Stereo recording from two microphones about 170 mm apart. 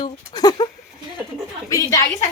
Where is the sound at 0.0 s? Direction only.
25° left (ahead or behind).